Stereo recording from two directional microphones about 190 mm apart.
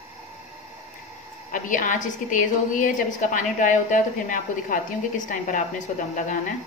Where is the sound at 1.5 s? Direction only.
45° left (ahead or behind).